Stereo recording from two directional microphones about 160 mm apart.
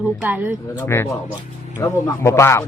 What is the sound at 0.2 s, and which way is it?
Speech, 10° right (ahead or behind).